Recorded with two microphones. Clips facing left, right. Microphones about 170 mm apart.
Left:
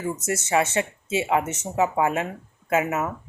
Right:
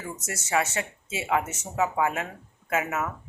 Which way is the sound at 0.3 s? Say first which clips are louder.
Left 4 dB; 20° left (ahead or behind).